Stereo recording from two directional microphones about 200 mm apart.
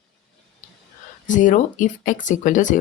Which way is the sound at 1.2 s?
40° left (ahead or behind).